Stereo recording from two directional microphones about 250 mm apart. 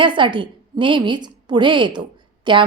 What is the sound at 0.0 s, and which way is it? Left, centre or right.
A woman's voice, centre.